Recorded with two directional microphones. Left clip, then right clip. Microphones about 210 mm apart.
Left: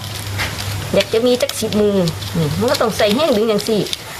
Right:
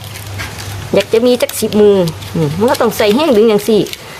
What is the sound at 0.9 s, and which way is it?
Speech, 55° right (ahead or behind).